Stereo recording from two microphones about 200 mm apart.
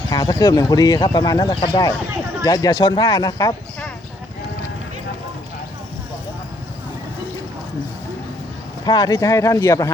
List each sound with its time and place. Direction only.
0.1 s speech: 20° left (ahead or behind)
8.8 s speech: 20° left (ahead or behind)